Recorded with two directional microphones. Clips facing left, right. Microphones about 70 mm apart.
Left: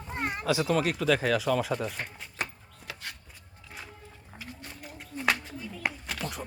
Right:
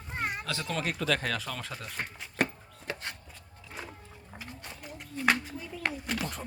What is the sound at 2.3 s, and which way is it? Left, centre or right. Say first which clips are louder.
Chopping: right 7 dB; right.